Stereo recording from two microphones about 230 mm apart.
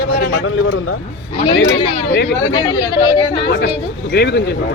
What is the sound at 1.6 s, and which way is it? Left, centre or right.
Speech, left.